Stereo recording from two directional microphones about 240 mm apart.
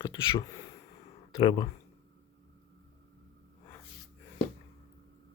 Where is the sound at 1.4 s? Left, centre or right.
Left.